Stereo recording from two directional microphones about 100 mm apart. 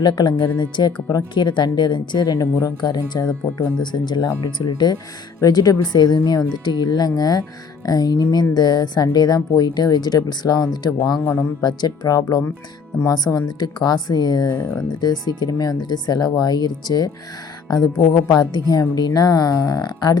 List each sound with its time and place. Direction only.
0.0 s speech: 50° left (ahead or behind)